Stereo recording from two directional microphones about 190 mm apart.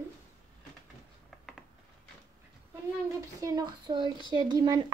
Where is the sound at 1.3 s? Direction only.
Centre (ahead or behind).